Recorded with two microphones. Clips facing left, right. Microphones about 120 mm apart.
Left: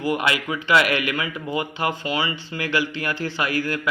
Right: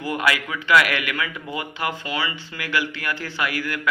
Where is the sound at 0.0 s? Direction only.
20° left (ahead or behind).